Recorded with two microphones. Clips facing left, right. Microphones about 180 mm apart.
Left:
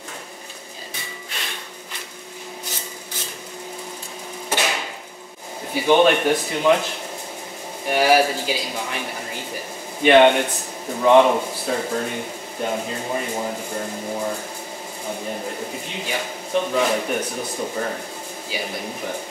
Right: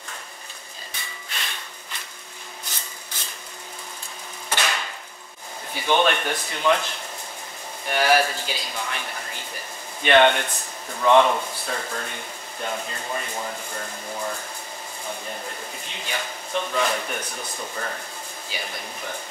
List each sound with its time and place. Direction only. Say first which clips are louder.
0.9 s a sound: left 1 dB; 5° left (ahead or behind)
2.7 s rub: left 6 dB; 5° left (ahead or behind)
4.5 s hammer: left 3 dB; 10° left (ahead or behind)
5.7 s a man's voice: left 6 dB; 10° left (ahead or behind)